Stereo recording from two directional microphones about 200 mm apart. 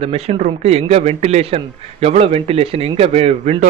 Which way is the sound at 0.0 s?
30° right (ahead or behind).